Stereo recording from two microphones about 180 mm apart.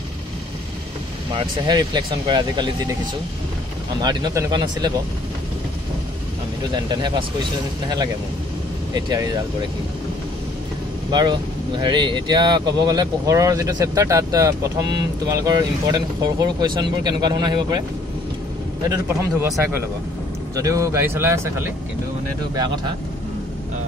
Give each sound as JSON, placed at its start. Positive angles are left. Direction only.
{"t": 1.3, "sound": "speech", "side_deg": -25}
{"t": 4.0, "sound": "speech", "side_deg": -25}
{"t": 6.9, "sound": "speech", "side_deg": -25}
{"t": 11.1, "sound": "speech", "side_deg": -25}
{"t": 18.9, "sound": "speech", "side_deg": -15}
{"t": 20.5, "sound": "speech", "side_deg": -20}